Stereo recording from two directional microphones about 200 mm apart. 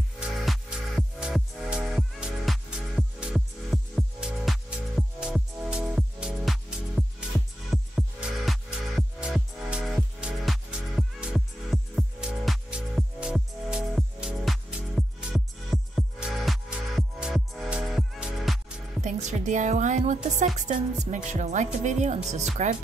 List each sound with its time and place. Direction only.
0.2 s music: 5° right (ahead or behind)
18.9 s music: 35° right (ahead or behind)